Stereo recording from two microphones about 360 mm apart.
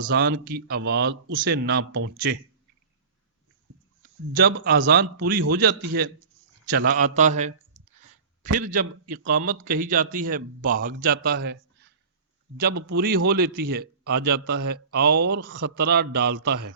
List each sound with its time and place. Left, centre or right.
0.0 s speech: right
4.4 s speech: right
6.7 s speech: right
8.5 s speech: right
12.5 s speech: right